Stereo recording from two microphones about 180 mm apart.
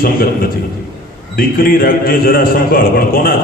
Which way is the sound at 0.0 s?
55° left (ahead or behind).